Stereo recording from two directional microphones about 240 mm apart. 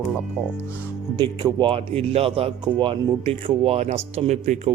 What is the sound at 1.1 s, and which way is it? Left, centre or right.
Speech, centre.